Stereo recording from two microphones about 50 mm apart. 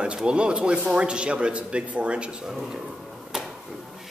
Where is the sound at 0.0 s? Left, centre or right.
Centre.